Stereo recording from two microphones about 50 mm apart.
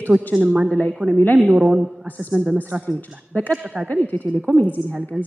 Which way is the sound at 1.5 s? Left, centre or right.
Centre.